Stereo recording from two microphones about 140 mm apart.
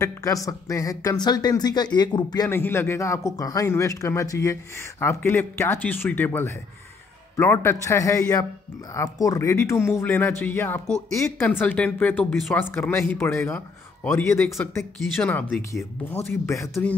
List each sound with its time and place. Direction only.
0.0 s speech: 25° left (ahead or behind)
2.5 s speech: 15° left (ahead or behind)